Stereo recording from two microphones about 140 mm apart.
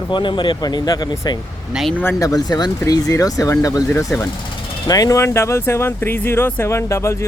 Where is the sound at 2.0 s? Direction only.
20° left (ahead or behind).